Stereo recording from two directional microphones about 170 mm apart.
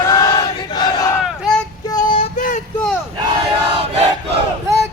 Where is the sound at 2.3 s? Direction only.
50° left (ahead or behind).